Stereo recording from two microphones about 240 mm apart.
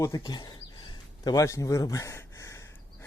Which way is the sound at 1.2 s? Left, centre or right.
Centre.